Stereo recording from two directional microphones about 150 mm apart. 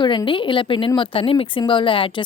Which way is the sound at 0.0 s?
30° left (ahead or behind).